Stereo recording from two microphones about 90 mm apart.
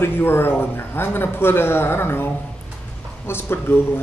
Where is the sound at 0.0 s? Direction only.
25° left (ahead or behind).